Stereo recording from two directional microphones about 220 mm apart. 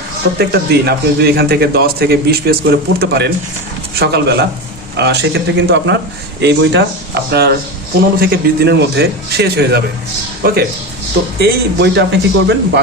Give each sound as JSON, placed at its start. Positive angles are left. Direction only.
{"t": 0.4, "sound": "a man's voice", "side_deg": -45}